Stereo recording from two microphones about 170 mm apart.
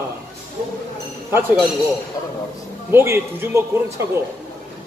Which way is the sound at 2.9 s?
15° right (ahead or behind).